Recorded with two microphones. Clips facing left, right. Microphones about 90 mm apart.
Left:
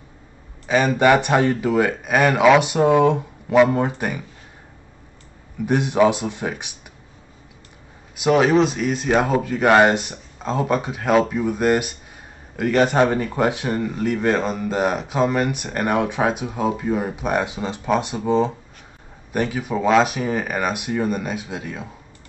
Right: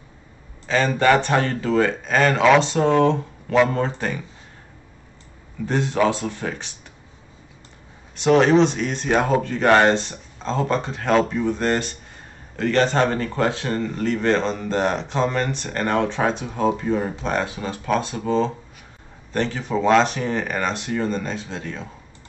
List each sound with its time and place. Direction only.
0.7 s speech: 15° left (ahead or behind)
5.7 s speech: 15° left (ahead or behind)
8.2 s speech: 5° left (ahead or behind)